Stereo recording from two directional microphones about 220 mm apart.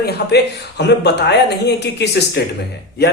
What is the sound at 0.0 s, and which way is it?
Speech, 50° left (ahead or behind).